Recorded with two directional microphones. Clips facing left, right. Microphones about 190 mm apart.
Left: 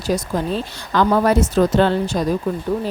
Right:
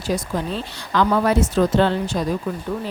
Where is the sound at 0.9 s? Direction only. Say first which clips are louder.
Left 2 dB; 40° left (ahead or behind).